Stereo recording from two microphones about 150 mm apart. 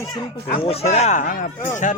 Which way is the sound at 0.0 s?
25° left (ahead or behind).